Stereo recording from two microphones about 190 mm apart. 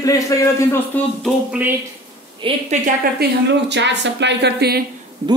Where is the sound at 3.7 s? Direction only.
65° right (ahead or behind).